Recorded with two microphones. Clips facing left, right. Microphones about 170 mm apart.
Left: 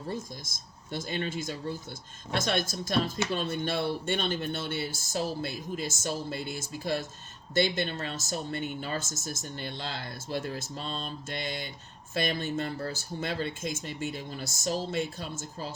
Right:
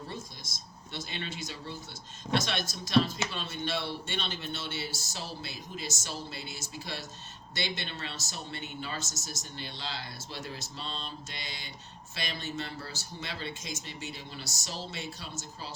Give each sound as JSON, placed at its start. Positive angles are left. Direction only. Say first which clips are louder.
{"t": 0.1, "sound": "speech", "louder": "left 6 dB", "side_deg": 45}